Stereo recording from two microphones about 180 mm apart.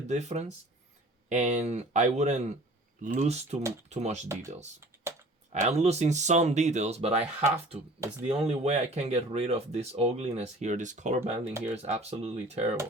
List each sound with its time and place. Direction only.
0.1 s speech: 40° right (ahead or behind)
4.3 s speech: 15° right (ahead or behind)
5.5 s speech: 40° right (ahead or behind)